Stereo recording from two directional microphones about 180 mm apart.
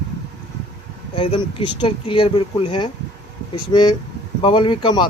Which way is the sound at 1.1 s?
30° left (ahead or behind).